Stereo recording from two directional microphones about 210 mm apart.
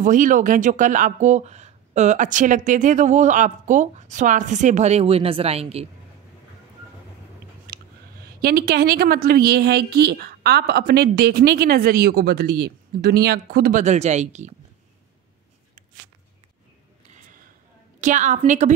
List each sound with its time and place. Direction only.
0.0 s speech: 40° right (ahead or behind)
8.4 s a woman's voice: 45° right (ahead or behind)
18.0 s speech: 35° right (ahead or behind)